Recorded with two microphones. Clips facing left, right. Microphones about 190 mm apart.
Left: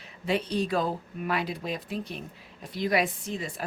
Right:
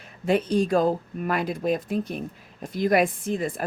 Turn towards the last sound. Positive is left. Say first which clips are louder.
# right 7 dB
turn(degrees=-50)  # may be behind; listen again after turning